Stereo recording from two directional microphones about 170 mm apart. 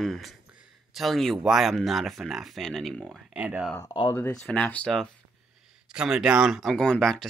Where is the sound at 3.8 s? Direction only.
20° left (ahead or behind); by 7.3 s 5° left (ahead or behind).